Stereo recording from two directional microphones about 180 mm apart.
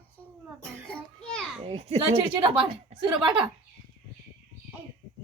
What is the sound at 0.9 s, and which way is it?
Children playing, centre (ahead or behind).